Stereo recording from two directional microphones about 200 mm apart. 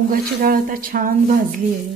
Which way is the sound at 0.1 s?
45° right (ahead or behind).